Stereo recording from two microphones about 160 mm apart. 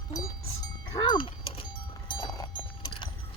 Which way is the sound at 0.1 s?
20° left (ahead or behind).